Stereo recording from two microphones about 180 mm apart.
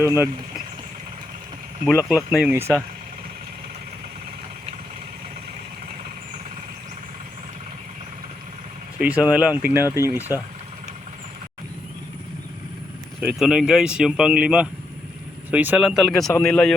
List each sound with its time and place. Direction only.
0.0 s speech: 15° right (ahead or behind)
1.9 s speech: centre (ahead or behind)
9.0 s speech: 10° right (ahead or behind)
13.2 s speech: 5° right (ahead or behind)